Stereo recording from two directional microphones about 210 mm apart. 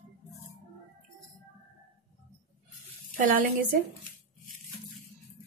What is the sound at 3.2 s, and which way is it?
Speech, 40° right (ahead or behind).